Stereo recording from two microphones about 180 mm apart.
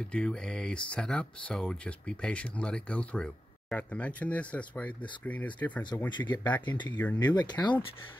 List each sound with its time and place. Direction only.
0.0 s speech: 5° left (ahead or behind)
6.0 s speech: 25° left (ahead or behind)
6.9 s speech: 10° left (ahead or behind)
7.4 s speech: 25° left (ahead or behind)